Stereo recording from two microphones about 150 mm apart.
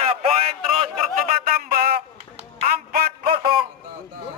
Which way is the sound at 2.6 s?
80° right.